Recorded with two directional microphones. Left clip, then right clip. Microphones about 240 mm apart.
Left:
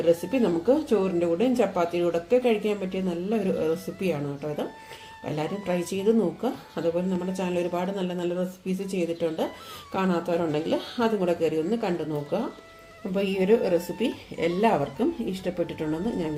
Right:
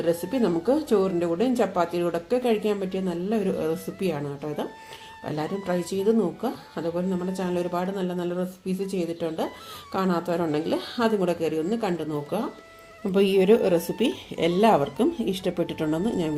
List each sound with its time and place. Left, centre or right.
0.0 s speech: centre
13.1 s speech: right